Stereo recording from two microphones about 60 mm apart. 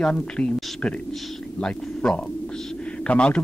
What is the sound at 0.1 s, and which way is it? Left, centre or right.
A man's voice, centre.